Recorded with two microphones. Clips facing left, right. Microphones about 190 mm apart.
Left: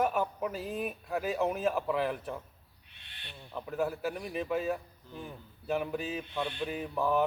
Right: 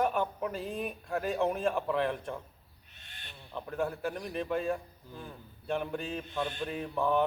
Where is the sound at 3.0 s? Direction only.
45° right (ahead or behind).